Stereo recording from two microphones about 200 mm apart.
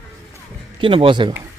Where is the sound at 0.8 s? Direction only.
25° right (ahead or behind).